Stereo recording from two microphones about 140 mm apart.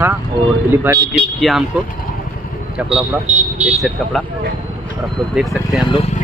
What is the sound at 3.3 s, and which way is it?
Vehicle, 55° right (ahead or behind).